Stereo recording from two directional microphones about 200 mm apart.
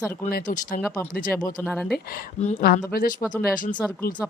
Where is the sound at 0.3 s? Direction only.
45° left (ahead or behind).